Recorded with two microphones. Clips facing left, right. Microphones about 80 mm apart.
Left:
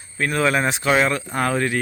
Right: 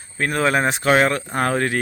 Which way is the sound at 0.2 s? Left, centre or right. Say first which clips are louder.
Right 1 dB; right.